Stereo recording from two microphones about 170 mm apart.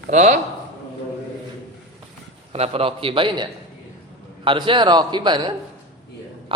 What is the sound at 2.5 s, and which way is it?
Speech, 35° right (ahead or behind).